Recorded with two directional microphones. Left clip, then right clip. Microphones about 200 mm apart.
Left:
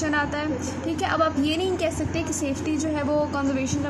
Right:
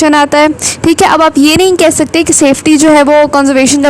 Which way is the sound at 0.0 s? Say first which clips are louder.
Right 19 dB; 55° right (ahead or behind).